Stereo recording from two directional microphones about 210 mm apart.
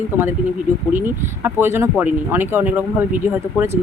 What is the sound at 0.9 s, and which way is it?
Speech, 10° right (ahead or behind).